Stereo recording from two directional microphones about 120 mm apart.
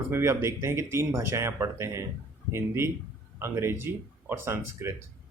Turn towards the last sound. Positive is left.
turn(degrees=-20)  # may be behind; listen again after turning